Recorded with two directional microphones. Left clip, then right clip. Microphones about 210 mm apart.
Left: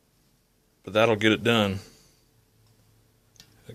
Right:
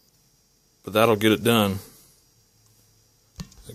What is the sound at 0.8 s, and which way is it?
Speech, 25° right (ahead or behind).